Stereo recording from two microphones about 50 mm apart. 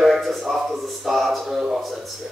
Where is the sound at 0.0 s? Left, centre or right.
Centre.